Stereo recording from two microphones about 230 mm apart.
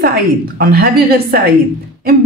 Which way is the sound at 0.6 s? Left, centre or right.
Right.